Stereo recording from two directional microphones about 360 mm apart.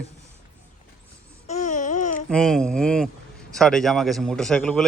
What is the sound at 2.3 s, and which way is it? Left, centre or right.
A man's voice, centre.